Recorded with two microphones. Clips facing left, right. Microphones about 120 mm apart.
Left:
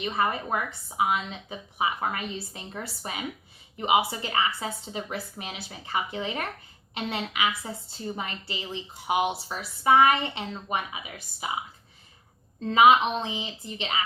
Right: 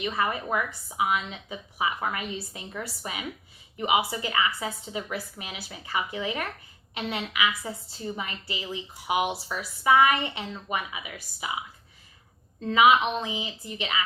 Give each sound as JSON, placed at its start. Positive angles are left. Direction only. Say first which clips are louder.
{"t": 0.0, "sound": "a woman's voice", "louder": "left 1 dB", "side_deg": 35}
{"t": 12.7, "sound": "a woman's voice", "louder": "left 1 dB", "side_deg": 30}